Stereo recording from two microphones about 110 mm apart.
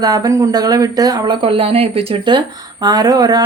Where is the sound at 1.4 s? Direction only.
55° right (ahead or behind).